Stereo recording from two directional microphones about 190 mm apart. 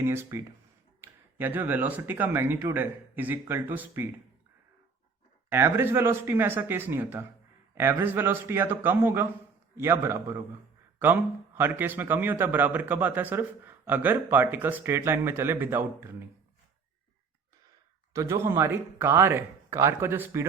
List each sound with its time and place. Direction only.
0.0 s a man's voice: 15° right (ahead or behind)
5.5 s a man's voice: 10° right (ahead or behind)
18.1 s a man's voice: 15° right (ahead or behind)